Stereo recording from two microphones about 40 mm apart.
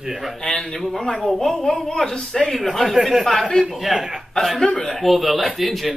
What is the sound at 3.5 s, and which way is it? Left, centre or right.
Speech, centre.